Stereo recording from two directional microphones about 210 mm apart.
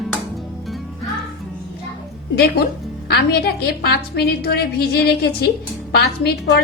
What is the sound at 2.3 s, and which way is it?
A woman's voice, 50° left (ahead or behind).